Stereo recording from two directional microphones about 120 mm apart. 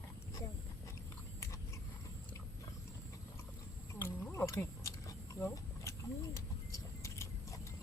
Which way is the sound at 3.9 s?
20° left (ahead or behind).